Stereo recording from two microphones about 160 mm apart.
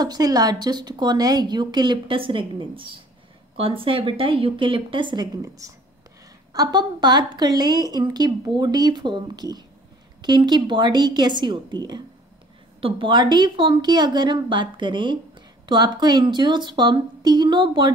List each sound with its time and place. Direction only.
0.0 s a woman's voice: 25° right (ahead or behind)